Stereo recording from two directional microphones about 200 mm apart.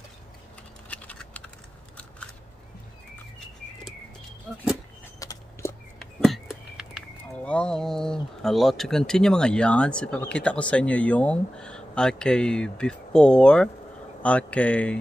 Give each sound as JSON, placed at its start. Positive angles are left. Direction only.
{"t": 0.8, "sound": "typing", "side_deg": 5}
{"t": 5.2, "sound": "vehicle", "side_deg": 15}
{"t": 5.9, "sound": "speech", "side_deg": 0}